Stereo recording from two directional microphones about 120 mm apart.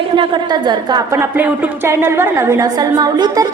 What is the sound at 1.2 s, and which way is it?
A woman's voice, 15° right (ahead or behind).